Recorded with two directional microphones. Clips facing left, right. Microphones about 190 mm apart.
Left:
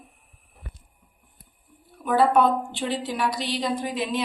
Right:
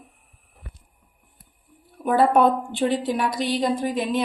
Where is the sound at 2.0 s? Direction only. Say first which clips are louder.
Right 2 dB; 50° right (ahead or behind).